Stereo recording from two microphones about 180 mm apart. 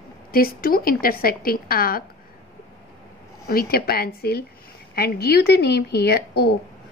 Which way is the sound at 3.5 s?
55° left (ahead or behind).